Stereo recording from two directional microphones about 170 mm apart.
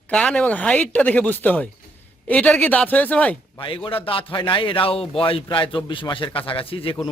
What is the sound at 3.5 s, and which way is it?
A man's voice, 30° left (ahead or behind).